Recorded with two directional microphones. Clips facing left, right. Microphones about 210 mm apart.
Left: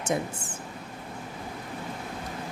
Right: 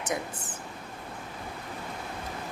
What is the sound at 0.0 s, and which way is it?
Speech, 25° left (ahead or behind).